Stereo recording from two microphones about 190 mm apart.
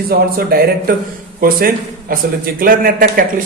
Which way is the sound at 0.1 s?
50° right (ahead or behind).